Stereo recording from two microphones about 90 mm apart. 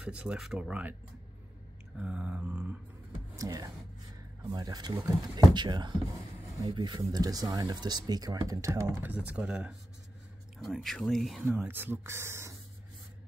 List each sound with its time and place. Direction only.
0.0 s speech: 15° right (ahead or behind)
2.0 s a sound: 10° right (ahead or behind)
3.3 s speech: 40° right (ahead or behind); by 9.8 s 10° right (ahead or behind)
10.6 s speech: centre (ahead or behind)
11.6 s speech: 25° right (ahead or behind)